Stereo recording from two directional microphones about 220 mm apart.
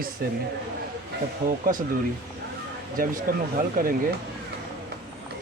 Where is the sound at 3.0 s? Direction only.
40° right (ahead or behind).